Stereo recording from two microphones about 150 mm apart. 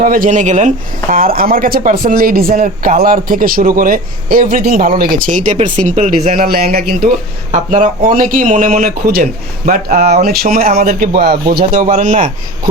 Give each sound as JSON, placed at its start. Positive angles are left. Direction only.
{"t": 0.0, "sound": "speech", "side_deg": -60}
{"t": 1.1, "sound": "a man's voice", "side_deg": -80}
{"t": 2.5, "sound": "a man's voice", "side_deg": -55}
{"t": 7.5, "sound": "speech", "side_deg": -55}
{"t": 9.6, "sound": "speech", "side_deg": -60}
{"t": 10.2, "sound": "a man's voice", "side_deg": -80}